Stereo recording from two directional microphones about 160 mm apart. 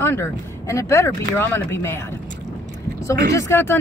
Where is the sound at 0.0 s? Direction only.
15° left (ahead or behind).